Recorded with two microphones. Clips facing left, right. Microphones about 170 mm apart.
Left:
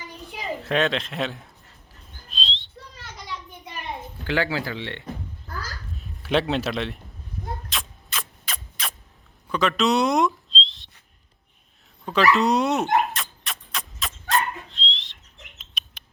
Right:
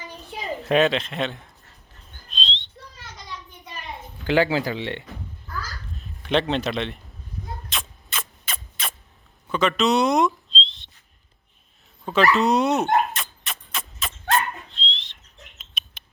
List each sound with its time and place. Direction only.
0.6 s a sound: 15° right (ahead or behind)
0.9 s a man's voice: centre (ahead or behind)
2.3 s bird: centre (ahead or behind)
3.0 s a sound: centre (ahead or behind)
4.3 s speech: 20° right (ahead or behind)
6.0 s speech: 5° left (ahead or behind)
7.7 s a sound: centre (ahead or behind)
12.0 s dog: centre (ahead or behind)
15.5 s frog: centre (ahead or behind)